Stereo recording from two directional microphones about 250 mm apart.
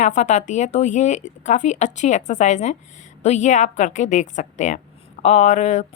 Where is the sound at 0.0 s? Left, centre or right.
Left.